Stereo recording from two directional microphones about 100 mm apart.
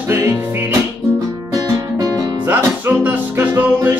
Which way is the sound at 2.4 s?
20° right (ahead or behind).